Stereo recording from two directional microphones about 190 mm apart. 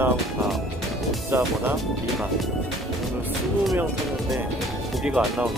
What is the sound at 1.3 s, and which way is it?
Speech, 10° right (ahead or behind).